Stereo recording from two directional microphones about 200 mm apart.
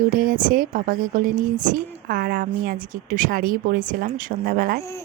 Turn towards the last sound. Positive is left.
turn(degrees=-50)  # may be behind; listen again after turning